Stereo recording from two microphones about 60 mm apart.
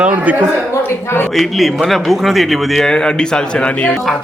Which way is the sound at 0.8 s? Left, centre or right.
Left.